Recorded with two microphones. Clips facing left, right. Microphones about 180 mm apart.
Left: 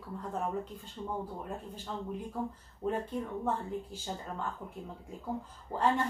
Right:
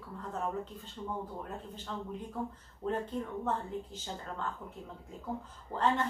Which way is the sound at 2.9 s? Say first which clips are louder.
Even; 10° left (ahead or behind).